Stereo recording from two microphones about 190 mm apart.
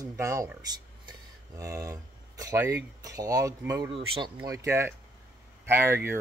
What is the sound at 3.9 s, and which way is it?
Speech, 25° right (ahead or behind).